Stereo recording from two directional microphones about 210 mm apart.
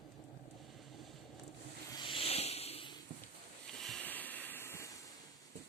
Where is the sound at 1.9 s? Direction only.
25° left (ahead or behind).